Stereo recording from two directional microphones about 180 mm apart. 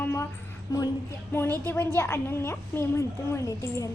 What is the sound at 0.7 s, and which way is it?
A woman's voice, 20° left (ahead or behind).